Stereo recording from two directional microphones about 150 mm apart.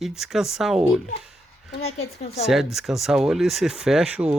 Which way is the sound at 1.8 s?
45° left (ahead or behind).